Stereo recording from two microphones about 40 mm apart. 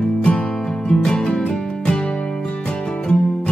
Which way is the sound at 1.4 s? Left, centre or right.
Left.